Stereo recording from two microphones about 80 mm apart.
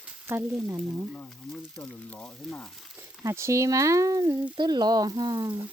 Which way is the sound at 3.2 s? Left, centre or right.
Right.